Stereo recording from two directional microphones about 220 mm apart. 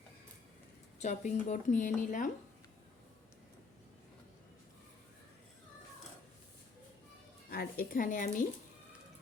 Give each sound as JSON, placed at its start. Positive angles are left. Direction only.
{"t": 0.9, "sound": "speech", "side_deg": 35}
{"t": 7.5, "sound": "speech", "side_deg": 45}